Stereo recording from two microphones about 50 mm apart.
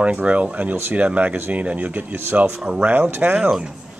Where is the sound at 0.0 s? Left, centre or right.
Right.